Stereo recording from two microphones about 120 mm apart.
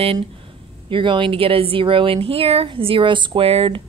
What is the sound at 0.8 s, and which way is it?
Speech, 45° right (ahead or behind).